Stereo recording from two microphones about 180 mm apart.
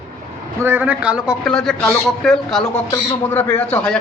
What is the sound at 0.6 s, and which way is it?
A man's voice, 10° right (ahead or behind).